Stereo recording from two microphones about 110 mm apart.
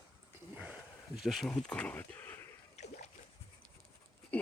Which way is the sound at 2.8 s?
90° left.